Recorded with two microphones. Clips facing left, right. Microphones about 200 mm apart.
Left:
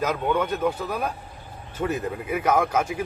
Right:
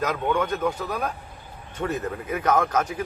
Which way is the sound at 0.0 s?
5° left (ahead or behind).